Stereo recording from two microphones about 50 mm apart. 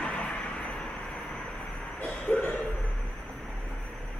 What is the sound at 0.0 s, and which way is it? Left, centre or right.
Vehicle, left.